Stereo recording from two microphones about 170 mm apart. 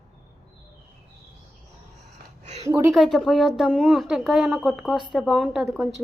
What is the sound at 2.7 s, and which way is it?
Speech, 15° right (ahead or behind).